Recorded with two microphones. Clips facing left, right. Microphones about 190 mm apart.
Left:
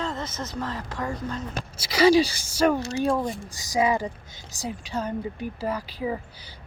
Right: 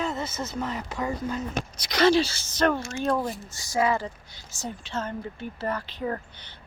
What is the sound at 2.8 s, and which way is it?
Speech, 35° left (ahead or behind).